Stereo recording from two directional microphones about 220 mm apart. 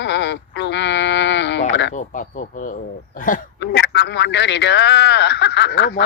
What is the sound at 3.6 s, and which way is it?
A man's voice, 50° left (ahead or behind).